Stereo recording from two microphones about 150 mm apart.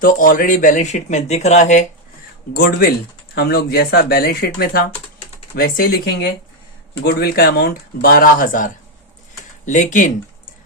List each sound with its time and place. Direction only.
0.0 s speech: 70° left (ahead or behind)
3.3 s speech: 90° left
5.5 s speech: 80° left; by 10.1 s 55° left (ahead or behind)